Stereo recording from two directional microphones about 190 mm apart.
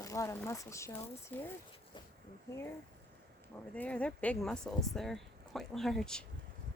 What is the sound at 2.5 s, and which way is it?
Speech, 15° left (ahead or behind).